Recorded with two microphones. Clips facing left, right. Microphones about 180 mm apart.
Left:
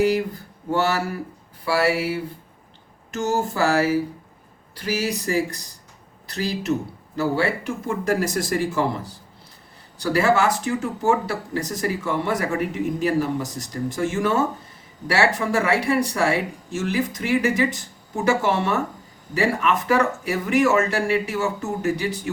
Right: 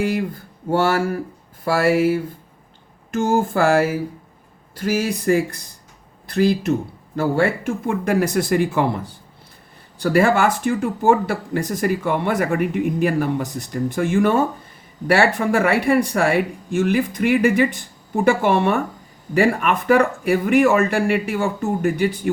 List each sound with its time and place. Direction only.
0.7 s speech: 50° right (ahead or behind)
10.0 s speech: 55° right (ahead or behind)